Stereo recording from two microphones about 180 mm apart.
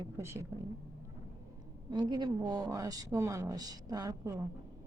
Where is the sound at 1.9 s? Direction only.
25° right (ahead or behind).